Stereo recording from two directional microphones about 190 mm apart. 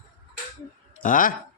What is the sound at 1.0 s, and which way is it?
Speech, 45° left (ahead or behind).